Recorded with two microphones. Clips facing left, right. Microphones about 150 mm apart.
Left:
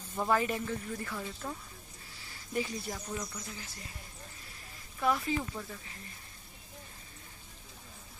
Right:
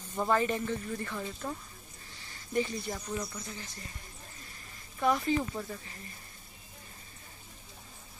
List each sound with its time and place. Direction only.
0.1 s speech: 5° left (ahead or behind)
5.0 s speech: centre (ahead or behind)
5.4 s speech: 10° right (ahead or behind)